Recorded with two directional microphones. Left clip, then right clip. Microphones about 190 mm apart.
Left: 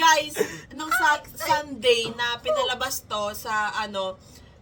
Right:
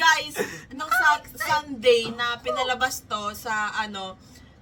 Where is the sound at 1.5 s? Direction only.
25° left (ahead or behind).